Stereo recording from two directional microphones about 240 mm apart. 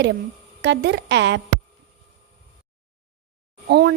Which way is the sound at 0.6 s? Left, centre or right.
Right.